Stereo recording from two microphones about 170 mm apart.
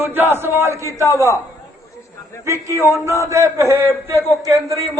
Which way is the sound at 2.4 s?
15° right (ahead or behind).